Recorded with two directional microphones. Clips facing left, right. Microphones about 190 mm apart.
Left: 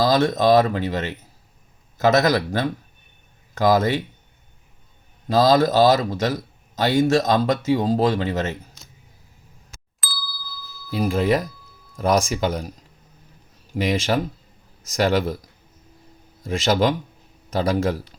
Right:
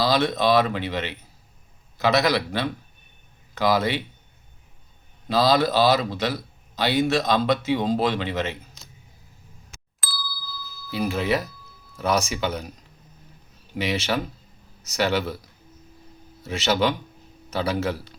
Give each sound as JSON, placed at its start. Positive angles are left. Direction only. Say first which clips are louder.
{"t": 0.0, "sound": "a man's voice", "louder": "left 3 dB", "side_deg": 45}
{"t": 5.3, "sound": "a man's voice", "louder": "left 4 dB", "side_deg": 45}
{"t": 10.0, "sound": "ding", "louder": "right 1 dB", "side_deg": 0}
{"t": 10.9, "sound": "a man's voice", "louder": "left 4 dB", "side_deg": 45}
{"t": 13.7, "sound": "a man's voice", "louder": "left 4 dB", "side_deg": 45}
{"t": 16.4, "sound": "a man's voice", "louder": "left 3 dB", "side_deg": 50}